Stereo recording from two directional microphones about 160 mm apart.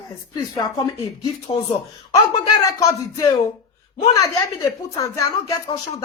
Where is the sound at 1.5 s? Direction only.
40° left (ahead or behind).